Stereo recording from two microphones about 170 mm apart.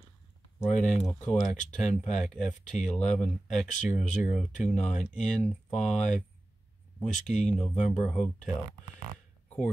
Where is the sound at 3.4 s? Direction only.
45° left (ahead or behind).